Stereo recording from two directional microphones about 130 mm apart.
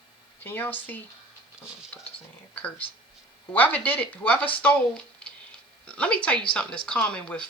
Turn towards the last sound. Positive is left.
turn(degrees=10)  # may be behind; listen again after turning